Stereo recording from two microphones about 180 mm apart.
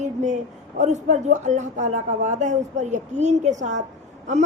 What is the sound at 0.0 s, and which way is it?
A woman's voice, 40° right (ahead or behind).